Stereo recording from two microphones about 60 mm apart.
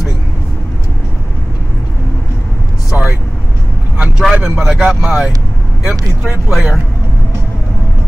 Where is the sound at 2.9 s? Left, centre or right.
Centre.